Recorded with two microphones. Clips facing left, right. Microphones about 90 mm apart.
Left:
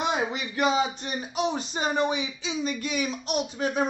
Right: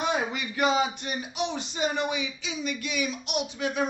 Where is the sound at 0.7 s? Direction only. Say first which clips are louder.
Even; 30° left (ahead or behind).